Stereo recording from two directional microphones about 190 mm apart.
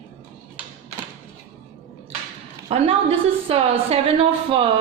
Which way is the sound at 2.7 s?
30° right (ahead or behind).